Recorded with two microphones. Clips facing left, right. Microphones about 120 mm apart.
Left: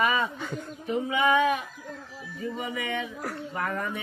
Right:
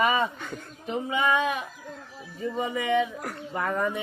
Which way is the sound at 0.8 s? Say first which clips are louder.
Left 1 dB; 25° right (ahead or behind).